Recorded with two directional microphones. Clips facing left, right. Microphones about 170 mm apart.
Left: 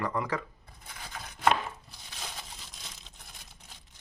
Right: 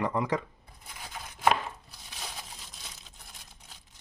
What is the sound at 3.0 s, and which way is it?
Crumpling, centre (ahead or behind).